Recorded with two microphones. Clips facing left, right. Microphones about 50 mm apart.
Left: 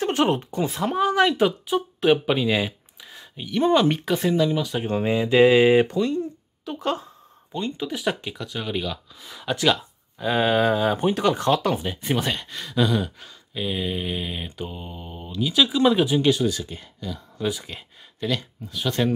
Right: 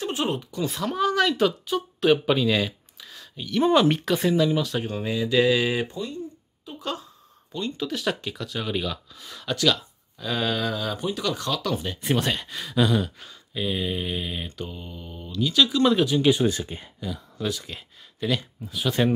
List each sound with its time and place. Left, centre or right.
0.0 s speech: left
0.7 s speech: left
3.6 s speech: centre
4.8 s speech: left
5.9 s a sound: left
6.8 s speech: left
7.5 s speech: left
12.0 s speech: centre
16.4 s speech: right
17.4 s speech: centre
17.6 s speech: centre